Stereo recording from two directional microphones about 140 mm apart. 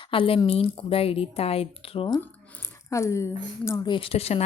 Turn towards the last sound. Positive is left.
turn(degrees=45)  # may be behind; listen again after turning